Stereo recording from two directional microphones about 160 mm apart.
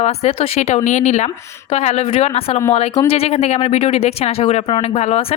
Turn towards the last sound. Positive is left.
turn(degrees=40)  # may be behind; listen again after turning